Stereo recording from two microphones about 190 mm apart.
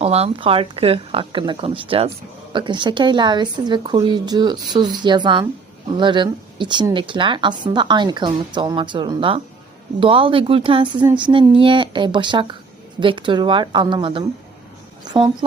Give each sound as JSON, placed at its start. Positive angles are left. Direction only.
{"t": 0.0, "sound": "a woman's voice", "side_deg": -30}